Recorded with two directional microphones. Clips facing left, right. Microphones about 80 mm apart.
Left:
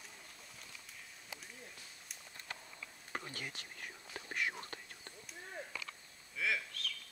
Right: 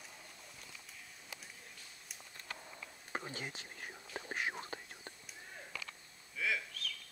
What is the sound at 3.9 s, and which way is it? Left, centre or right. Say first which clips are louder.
Whispering: right 3 dB; centre.